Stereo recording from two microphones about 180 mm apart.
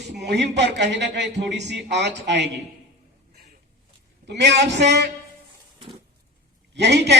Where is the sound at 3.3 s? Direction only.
60° right (ahead or behind).